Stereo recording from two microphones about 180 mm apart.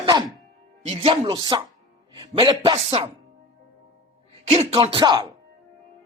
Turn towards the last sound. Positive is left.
turn(degrees=-25)  # may be behind; listen again after turning